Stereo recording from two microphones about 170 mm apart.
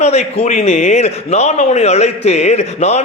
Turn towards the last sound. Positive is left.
turn(degrees=40)  # may be behind; listen again after turning